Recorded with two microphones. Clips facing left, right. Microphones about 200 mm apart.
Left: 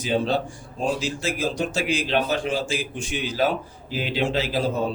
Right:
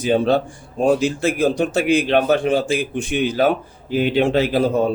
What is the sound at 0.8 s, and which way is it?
Speech, 60° right (ahead or behind).